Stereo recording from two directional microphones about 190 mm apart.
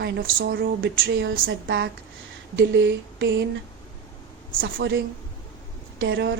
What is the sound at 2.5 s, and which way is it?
Speech, 70° right (ahead or behind).